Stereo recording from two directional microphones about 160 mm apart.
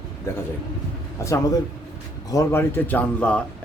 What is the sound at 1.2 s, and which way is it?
A man's voice, 15° left (ahead or behind).